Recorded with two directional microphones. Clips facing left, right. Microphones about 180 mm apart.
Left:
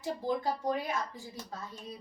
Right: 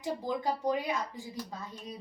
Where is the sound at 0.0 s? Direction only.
15° right (ahead or behind).